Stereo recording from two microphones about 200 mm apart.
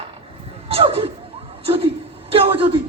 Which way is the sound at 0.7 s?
30° right (ahead or behind).